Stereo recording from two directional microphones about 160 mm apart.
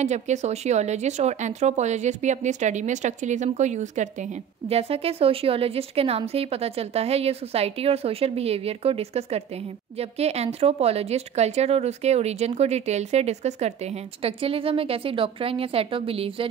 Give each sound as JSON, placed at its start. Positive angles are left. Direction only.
{"t": 0.0, "sound": "speech", "side_deg": -45}